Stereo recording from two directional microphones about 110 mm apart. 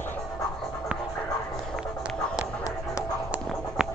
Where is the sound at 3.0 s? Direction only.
5° right (ahead or behind).